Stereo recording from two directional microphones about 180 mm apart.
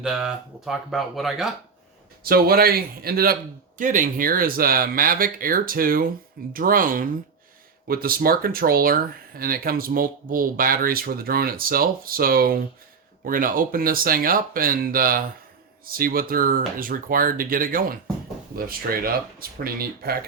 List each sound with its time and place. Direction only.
0.0 s speech: 5° right (ahead or behind)
2.2 s speech: 55° right (ahead or behind)
3.8 s speech: 45° right (ahead or behind)